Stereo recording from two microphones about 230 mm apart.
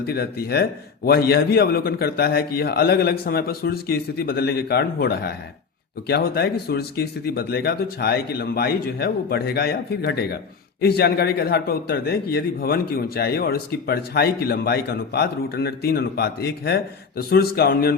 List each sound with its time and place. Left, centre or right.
0.0 s a man's voice: left